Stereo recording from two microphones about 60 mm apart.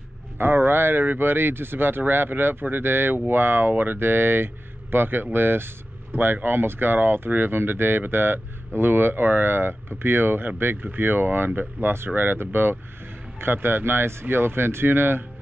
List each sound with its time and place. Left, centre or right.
0.4 s speech: right